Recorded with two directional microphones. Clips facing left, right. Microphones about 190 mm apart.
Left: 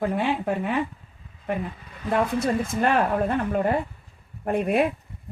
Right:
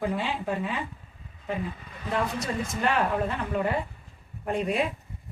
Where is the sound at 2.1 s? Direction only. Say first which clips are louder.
Left 6 dB; 55° left (ahead or behind).